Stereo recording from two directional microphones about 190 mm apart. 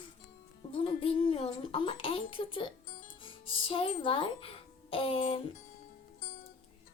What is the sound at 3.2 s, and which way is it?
Speech, 30° left (ahead or behind).